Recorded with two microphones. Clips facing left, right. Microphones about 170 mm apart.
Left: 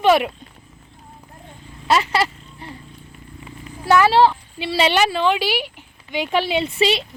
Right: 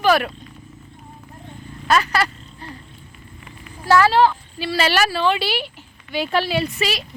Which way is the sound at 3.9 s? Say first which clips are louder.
Left 1 dB; 20° left (ahead or behind).